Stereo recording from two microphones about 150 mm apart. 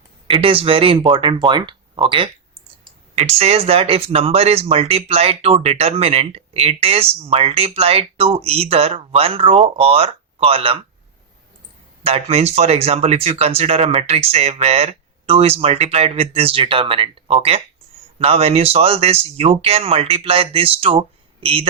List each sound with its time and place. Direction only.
0.3 s speech: 35° right (ahead or behind)
12.0 s speech: 40° right (ahead or behind)